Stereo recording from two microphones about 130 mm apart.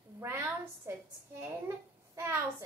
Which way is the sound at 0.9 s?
20° right (ahead or behind).